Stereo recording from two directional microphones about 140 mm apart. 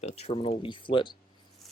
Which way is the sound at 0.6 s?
35° left (ahead or behind).